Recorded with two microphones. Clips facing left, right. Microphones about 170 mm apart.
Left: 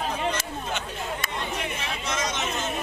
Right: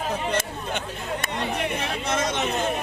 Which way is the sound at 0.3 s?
55° right (ahead or behind).